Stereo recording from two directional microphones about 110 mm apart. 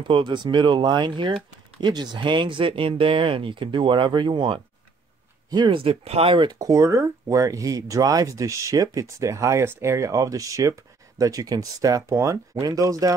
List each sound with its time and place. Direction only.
0.1 s speech: 45° right (ahead or behind)
5.9 s speech: 65° right (ahead or behind)
6.6 s speech: 30° right (ahead or behind)